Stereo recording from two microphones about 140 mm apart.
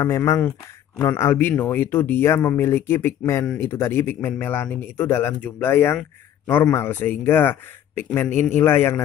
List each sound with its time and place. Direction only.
0.0 s speech: 20° left (ahead or behind)